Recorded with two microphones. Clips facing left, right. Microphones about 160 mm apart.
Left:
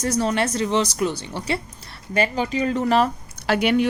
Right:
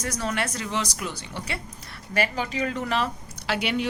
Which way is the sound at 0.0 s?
30° left (ahead or behind).